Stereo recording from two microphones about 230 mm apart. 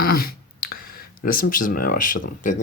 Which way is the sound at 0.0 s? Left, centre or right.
Left.